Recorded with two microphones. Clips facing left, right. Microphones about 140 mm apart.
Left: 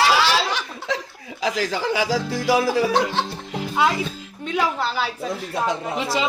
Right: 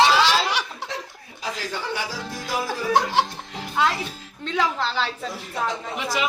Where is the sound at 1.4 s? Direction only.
90° left.